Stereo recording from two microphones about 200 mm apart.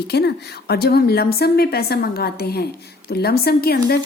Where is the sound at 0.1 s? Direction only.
55° left (ahead or behind).